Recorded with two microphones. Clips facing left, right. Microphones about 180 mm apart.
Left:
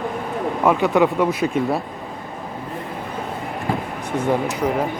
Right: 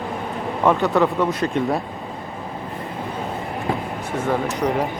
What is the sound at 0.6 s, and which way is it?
Speech, 10° left (ahead or behind).